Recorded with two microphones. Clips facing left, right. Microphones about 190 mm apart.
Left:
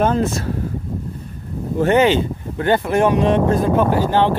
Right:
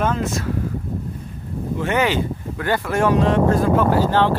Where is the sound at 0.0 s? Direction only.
35° left (ahead or behind).